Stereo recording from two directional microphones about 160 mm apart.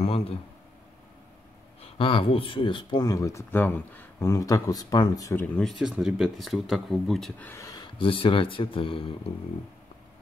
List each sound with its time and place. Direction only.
0.0 s a sound: 40° left (ahead or behind)
1.8 s speech: 35° left (ahead or behind); by 5.5 s 15° left (ahead or behind)
5.6 s speech: centre (ahead or behind); by 9.1 s 35° left (ahead or behind)